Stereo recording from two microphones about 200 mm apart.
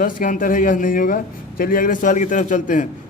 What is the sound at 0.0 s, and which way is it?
A man's voice, 45° left (ahead or behind).